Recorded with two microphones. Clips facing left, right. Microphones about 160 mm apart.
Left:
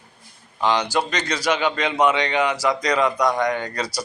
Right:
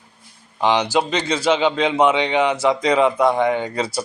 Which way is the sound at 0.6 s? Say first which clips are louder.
Right 3 dB; 15° right (ahead or behind).